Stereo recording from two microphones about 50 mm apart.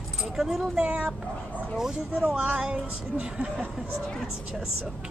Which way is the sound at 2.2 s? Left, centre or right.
Right.